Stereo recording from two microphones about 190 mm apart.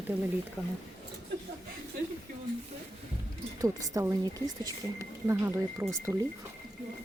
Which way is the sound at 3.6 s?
20° right (ahead or behind).